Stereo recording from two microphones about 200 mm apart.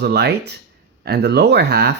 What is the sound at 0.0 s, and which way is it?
Speech, 55° right (ahead or behind).